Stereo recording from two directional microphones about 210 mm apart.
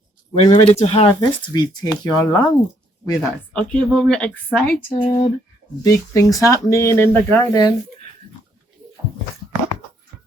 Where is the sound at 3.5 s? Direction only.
5° left (ahead or behind).